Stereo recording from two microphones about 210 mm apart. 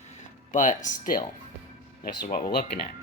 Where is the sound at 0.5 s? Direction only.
40° left (ahead or behind).